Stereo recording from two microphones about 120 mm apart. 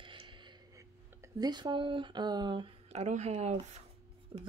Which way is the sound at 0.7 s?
30° right (ahead or behind).